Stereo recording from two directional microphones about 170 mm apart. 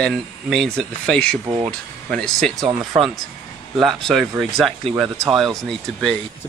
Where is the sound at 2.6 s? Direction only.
25° right (ahead or behind).